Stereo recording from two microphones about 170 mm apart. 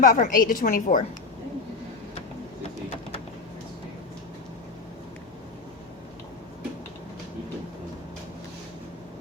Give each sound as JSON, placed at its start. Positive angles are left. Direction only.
{"t": 0.0, "sound": "a woman's voice", "side_deg": 50}